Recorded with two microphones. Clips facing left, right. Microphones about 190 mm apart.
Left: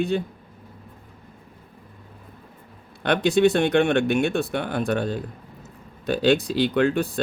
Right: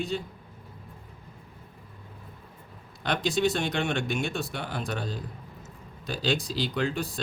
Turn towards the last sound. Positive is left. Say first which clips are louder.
# left 8 dB
turn(degrees=60)  # may be behind; listen again after turning